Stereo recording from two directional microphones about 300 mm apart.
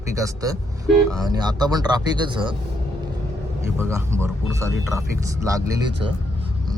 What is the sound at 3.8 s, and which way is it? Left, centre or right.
Speech, centre.